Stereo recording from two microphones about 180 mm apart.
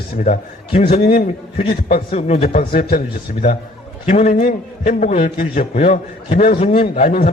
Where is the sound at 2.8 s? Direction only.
50° left (ahead or behind); by 7.0 s 35° left (ahead or behind).